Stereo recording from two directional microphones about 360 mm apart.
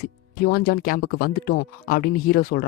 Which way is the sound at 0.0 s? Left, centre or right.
Left.